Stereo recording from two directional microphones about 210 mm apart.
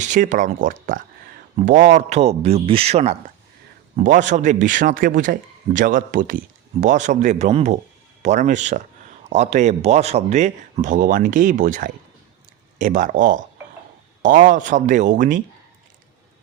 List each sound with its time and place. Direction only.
0.0 s a man's voice: 35° right (ahead or behind)